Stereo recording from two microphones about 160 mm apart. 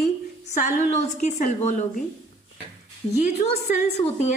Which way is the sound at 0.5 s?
45° left (ahead or behind).